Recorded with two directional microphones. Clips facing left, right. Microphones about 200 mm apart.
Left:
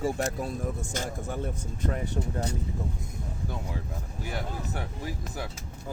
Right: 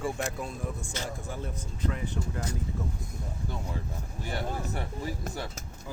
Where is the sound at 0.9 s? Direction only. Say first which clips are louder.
Left 3 dB; 50° left (ahead or behind).